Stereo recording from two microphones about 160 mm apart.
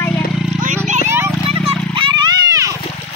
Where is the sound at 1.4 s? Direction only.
35° right (ahead or behind).